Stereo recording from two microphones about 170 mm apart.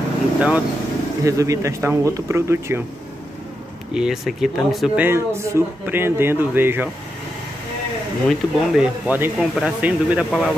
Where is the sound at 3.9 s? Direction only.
5° right (ahead or behind).